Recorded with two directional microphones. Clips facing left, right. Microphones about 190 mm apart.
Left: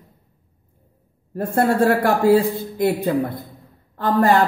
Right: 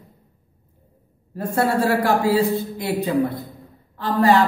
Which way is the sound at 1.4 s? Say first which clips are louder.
Left 3 dB; 55° left (ahead or behind).